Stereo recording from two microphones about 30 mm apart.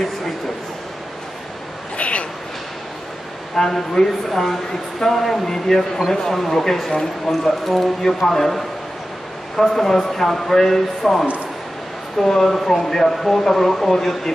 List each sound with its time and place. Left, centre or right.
2.0 s a sound: left
3.5 s a man's voice: centre
7.6 s a man's voice: centre